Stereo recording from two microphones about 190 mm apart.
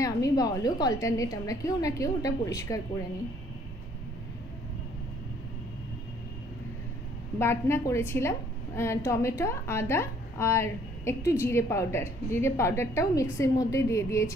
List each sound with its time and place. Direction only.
0.0 s a woman's voice: 20° left (ahead or behind)
7.3 s a woman's voice: 15° left (ahead or behind)